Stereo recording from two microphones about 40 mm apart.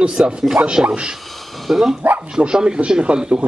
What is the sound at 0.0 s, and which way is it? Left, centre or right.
Speech, right.